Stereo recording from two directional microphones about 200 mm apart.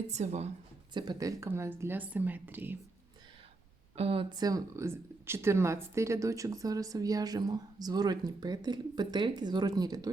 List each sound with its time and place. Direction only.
0.1 s speech: 35° right (ahead or behind)
0.9 s speech: 20° right (ahead or behind)
3.9 s speech: 30° right (ahead or behind)